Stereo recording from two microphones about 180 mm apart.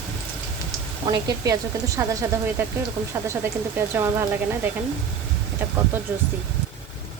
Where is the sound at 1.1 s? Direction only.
20° right (ahead or behind).